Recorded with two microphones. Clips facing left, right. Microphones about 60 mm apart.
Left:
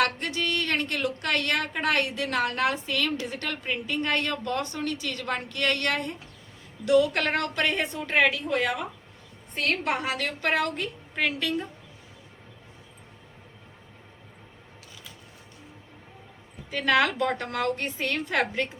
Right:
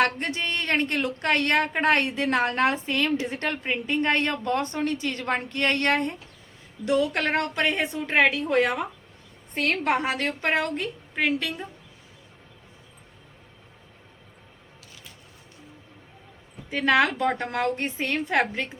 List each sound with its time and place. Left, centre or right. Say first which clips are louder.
0.0 s a woman's voice: right 2 dB; right
8.3 s speech: right 4 dB; right; by 11.6 s centre
16.6 s speech: right 2 dB; centre